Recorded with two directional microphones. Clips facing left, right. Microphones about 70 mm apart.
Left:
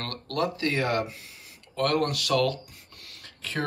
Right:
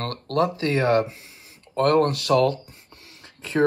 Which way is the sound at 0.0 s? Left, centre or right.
Right.